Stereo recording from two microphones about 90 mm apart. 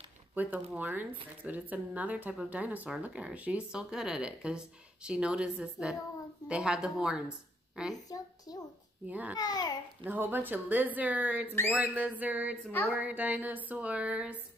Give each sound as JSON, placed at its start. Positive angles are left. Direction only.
{"t": 0.3, "sound": "a woman's voice", "side_deg": -15}
{"t": 7.9, "sound": "a woman's voice", "side_deg": 45}
{"t": 9.0, "sound": "speech", "side_deg": -15}
{"t": 9.4, "sound": "a woman's voice", "side_deg": 50}
{"t": 10.0, "sound": "a woman's voice", "side_deg": -20}